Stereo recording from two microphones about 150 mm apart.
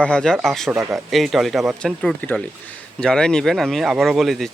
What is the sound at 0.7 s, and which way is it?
Speech, 20° right (ahead or behind).